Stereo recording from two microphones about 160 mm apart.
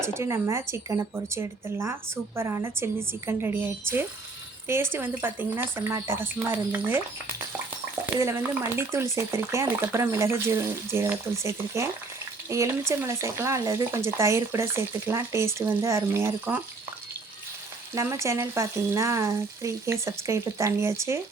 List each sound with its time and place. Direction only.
0.0 s speech: 15° right (ahead or behind)
17.9 s speech: 20° right (ahead or behind)